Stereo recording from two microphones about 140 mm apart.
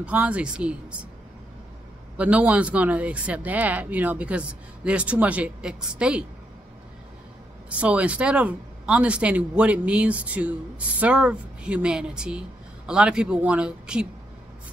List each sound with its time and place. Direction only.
0.0 s speech: 10° right (ahead or behind)
2.1 s speech: 10° right (ahead or behind)
7.8 s speech: 10° right (ahead or behind)